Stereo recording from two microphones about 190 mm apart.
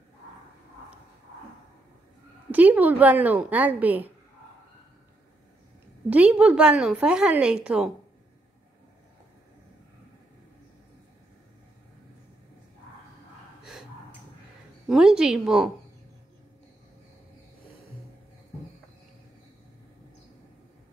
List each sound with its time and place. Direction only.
2.5 s a woman's voice: 10° right (ahead or behind)
6.0 s a woman's voice: 5° right (ahead or behind)
13.6 s gasp: 5° right (ahead or behind)
14.9 s a woman's voice: 5° right (ahead or behind)